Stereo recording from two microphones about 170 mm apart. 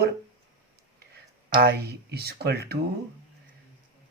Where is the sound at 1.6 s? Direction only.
70° right (ahead or behind).